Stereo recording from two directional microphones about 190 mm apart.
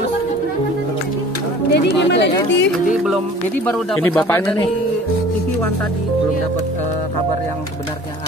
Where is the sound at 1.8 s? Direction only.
65° left (ahead or behind).